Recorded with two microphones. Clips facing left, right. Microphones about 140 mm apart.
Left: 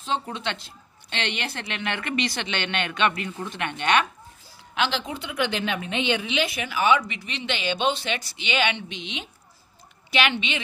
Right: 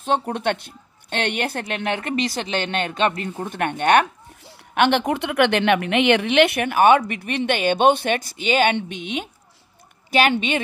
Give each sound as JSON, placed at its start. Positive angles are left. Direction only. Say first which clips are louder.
{"t": 0.0, "sound": "speech", "louder": "right 7 dB", "side_deg": -55}